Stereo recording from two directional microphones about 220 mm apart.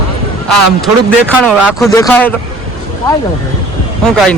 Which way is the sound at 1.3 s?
5° left (ahead or behind).